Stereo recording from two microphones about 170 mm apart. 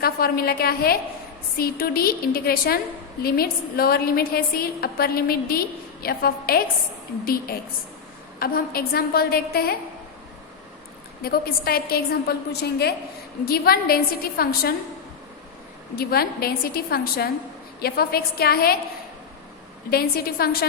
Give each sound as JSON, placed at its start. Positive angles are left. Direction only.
{"t": 0.0, "sound": "a woman's voice", "side_deg": 60}
{"t": 11.2, "sound": "a woman's voice", "side_deg": 65}
{"t": 16.0, "sound": "a woman's voice", "side_deg": 65}
{"t": 19.9, "sound": "a woman's voice", "side_deg": 65}